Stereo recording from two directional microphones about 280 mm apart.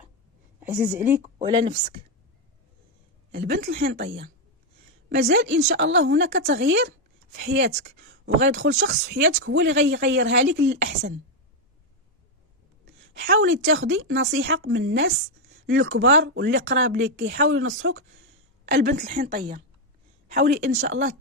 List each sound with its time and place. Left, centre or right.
0.6 s a woman's voice: centre
3.3 s speech: right
13.1 s speech: right
18.6 s a woman's voice: right